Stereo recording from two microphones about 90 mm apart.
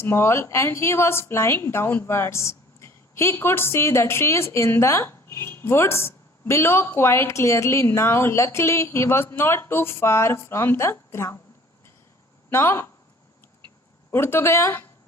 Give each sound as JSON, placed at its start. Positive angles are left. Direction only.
{"t": 0.0, "sound": "a woman's voice", "side_deg": 30}
{"t": 12.5, "sound": "a woman's voice", "side_deg": 25}
{"t": 14.1, "sound": "a woman's voice", "side_deg": 25}